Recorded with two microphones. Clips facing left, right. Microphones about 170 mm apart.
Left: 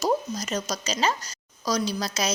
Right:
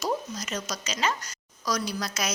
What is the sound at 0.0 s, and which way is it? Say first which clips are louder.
A woman's voice: left 5 dB; 35° left (ahead or behind).